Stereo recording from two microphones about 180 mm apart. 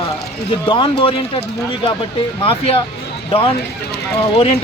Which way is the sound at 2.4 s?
30° left (ahead or behind).